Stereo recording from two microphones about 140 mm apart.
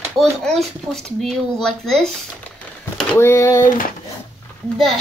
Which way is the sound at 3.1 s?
20° left (ahead or behind).